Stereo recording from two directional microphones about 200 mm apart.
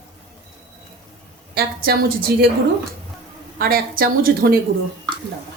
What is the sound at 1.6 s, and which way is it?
Speech, 50° right (ahead or behind).